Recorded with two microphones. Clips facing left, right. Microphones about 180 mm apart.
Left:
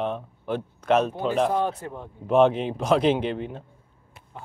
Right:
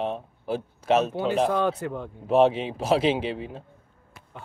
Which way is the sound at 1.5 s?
80° right.